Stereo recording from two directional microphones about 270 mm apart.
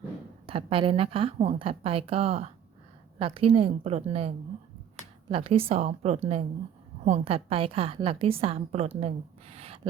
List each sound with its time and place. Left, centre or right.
0.4 s a woman's voice: centre